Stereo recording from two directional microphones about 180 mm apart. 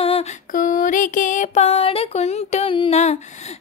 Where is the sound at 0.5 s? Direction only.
45° left (ahead or behind).